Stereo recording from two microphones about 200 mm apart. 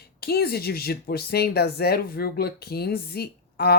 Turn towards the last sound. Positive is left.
turn(degrees=50)  # may be behind; listen again after turning